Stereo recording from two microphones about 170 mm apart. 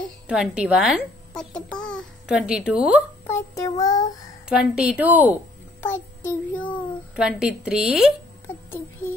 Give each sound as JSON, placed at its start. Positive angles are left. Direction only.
{"t": 0.3, "sound": "a child's voice", "side_deg": -5}
{"t": 2.3, "sound": "a child's voice", "side_deg": -5}
{"t": 3.3, "sound": "child singing", "side_deg": 20}
{"t": 4.5, "sound": "a woman's voice", "side_deg": -5}
{"t": 5.8, "sound": "child singing", "side_deg": 10}
{"t": 7.2, "sound": "a child's voice", "side_deg": -5}